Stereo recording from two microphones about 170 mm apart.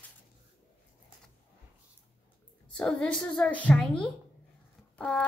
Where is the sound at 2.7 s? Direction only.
5° left (ahead or behind).